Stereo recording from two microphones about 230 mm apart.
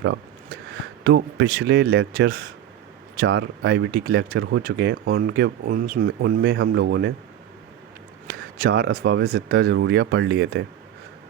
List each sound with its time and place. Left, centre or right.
1.0 s speech: right
8.3 s a sound: right
9.0 s speech: right